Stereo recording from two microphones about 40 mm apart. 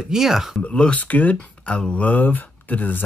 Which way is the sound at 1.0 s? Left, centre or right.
Left.